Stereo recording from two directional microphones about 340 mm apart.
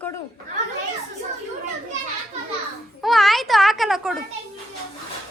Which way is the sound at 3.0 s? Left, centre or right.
Centre.